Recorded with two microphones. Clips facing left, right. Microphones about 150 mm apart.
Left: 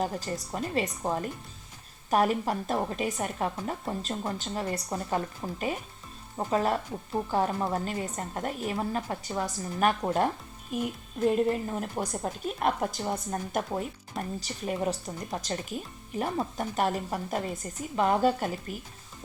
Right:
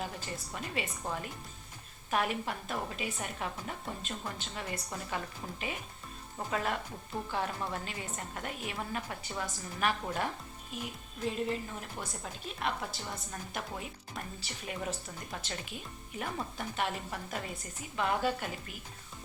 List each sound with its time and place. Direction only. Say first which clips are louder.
0.0 s a woman's voice: left 8 dB; 40° left (ahead or behind)